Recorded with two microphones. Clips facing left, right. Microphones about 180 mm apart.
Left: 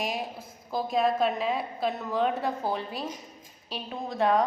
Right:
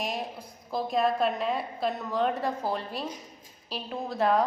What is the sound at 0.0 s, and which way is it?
A woman's voice, centre (ahead or behind).